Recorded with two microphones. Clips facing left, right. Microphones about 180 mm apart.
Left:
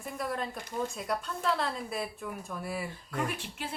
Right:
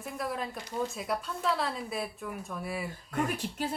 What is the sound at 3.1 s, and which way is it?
Speech, 40° right (ahead or behind).